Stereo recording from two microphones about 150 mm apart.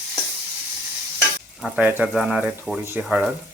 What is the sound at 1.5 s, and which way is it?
Frying, centre (ahead or behind).